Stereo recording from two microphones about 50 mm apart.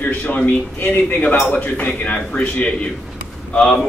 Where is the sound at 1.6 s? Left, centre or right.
Left.